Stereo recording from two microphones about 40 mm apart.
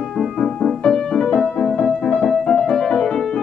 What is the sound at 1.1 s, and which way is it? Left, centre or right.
Music, centre.